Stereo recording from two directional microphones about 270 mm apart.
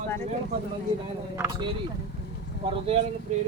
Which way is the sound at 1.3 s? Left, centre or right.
Centre.